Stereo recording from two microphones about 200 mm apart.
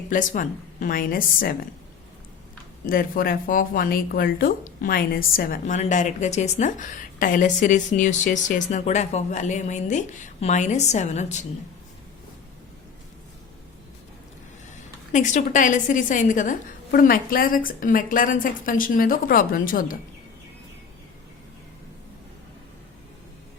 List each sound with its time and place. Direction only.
0.1 s a woman's voice: 40° left (ahead or behind)
2.8 s a woman's voice: 45° left (ahead or behind)
15.1 s a woman's voice: 40° left (ahead or behind)